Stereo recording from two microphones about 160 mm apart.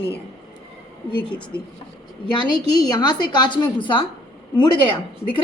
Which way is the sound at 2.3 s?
25° left (ahead or behind).